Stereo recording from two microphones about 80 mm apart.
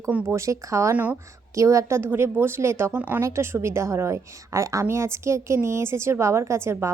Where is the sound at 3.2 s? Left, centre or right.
Right.